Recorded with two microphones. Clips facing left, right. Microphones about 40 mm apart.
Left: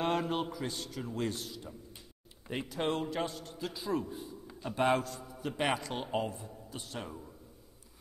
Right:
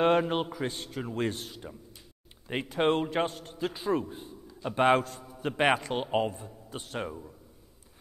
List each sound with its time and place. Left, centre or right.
0.0 s a man's voice: right